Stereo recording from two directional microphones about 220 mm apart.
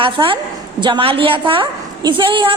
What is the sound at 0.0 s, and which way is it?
A woman's voice, 25° right (ahead or behind).